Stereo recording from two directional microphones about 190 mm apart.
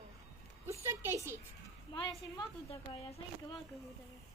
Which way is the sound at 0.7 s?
15° right (ahead or behind).